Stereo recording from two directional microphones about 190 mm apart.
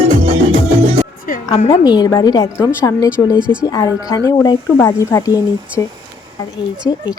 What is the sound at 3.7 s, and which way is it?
A woman's voice, 20° left (ahead or behind).